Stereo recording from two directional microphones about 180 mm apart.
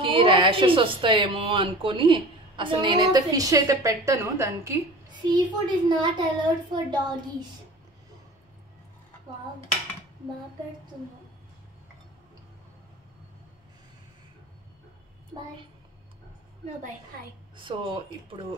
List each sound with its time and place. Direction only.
0.0 s speech: 30° right (ahead or behind)
17.6 s speech: 25° right (ahead or behind)